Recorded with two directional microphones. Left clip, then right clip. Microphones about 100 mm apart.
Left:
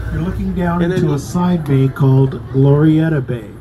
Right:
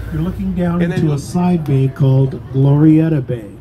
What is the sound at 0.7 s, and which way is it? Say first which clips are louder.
Speech: left 3 dB; 20° right (ahead or behind).